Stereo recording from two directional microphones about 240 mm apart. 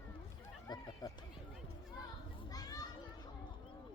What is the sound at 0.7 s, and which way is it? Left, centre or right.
Run, centre.